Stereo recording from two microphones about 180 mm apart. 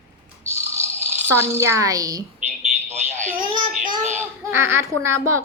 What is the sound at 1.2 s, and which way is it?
A woman's voice, 15° right (ahead or behind).